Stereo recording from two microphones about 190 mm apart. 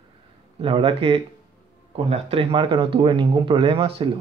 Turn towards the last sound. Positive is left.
turn(degrees=-30)  # may be behind; listen again after turning